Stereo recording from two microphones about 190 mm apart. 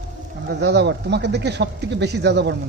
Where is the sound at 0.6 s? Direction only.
60° right (ahead or behind).